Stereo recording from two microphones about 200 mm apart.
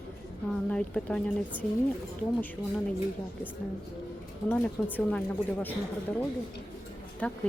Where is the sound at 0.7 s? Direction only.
5° left (ahead or behind).